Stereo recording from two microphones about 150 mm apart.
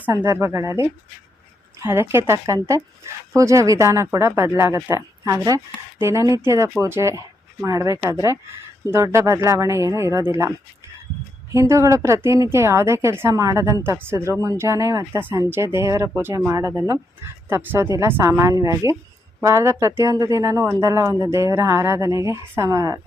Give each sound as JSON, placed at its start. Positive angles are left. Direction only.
{"t": 0.0, "sound": "speech", "side_deg": -15}
{"t": 1.8, "sound": "a woman's voice", "side_deg": -15}
{"t": 11.5, "sound": "a woman's voice", "side_deg": -20}